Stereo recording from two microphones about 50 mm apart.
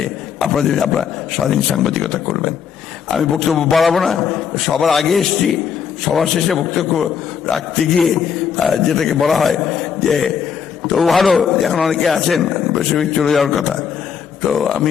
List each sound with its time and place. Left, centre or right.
0.3 s a man's voice: centre